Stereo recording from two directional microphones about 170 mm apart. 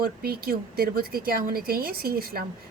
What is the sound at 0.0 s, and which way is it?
Speech, 60° right (ahead or behind).